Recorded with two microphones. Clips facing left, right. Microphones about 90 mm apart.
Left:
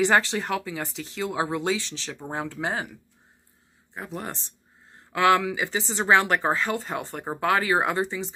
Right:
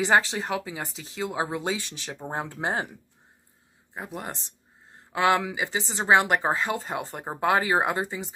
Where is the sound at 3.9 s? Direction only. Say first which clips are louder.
Left 1 dB; 20° right (ahead or behind).